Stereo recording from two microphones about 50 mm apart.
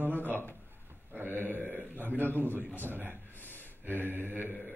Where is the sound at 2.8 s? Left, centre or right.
Right.